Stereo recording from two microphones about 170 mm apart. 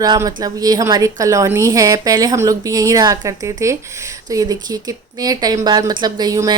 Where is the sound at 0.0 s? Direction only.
20° right (ahead or behind).